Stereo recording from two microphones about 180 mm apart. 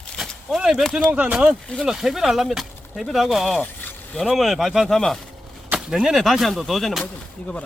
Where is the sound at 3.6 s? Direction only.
10° left (ahead or behind).